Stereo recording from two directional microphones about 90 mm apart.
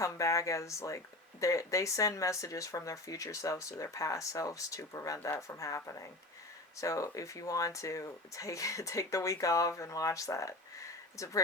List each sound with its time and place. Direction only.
0.0 s speech: 35° left (ahead or behind)